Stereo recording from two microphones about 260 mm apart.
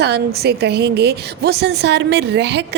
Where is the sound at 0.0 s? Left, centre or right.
Right.